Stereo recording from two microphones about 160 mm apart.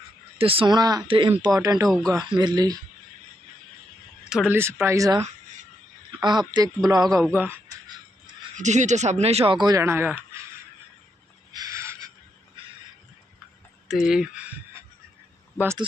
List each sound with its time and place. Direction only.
0.3 s speech: 35° right (ahead or behind)
1.5 s speech: 20° right (ahead or behind)
4.3 s speech: 5° right (ahead or behind); by 7.2 s 25° right (ahead or behind)
7.3 s speech: 15° right (ahead or behind)
8.5 s speech: 50° right (ahead or behind); by 10.2 s 15° right (ahead or behind)
11.5 s a sound: 20° right (ahead or behind)
13.8 s speech: centre (ahead or behind)